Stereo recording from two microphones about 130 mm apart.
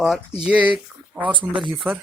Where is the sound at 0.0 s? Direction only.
5° right (ahead or behind).